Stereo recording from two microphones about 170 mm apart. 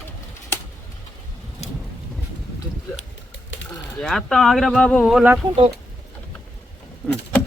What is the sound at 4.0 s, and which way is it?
Speech, centre (ahead or behind).